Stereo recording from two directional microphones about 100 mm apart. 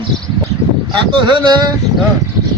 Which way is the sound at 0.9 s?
50° right (ahead or behind).